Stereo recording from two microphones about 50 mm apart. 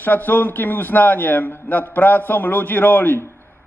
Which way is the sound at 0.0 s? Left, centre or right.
Left.